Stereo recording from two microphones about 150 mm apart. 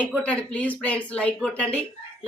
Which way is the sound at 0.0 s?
10° left (ahead or behind).